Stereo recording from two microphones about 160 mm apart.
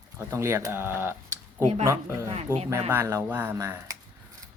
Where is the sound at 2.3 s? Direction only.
40° right (ahead or behind).